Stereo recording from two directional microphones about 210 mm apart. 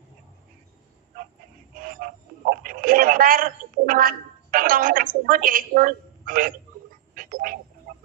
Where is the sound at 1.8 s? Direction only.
40° right (ahead or behind).